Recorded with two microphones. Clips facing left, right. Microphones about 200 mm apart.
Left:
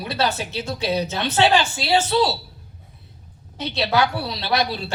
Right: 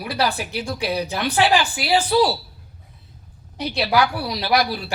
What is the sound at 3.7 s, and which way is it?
Speech, 25° left (ahead or behind).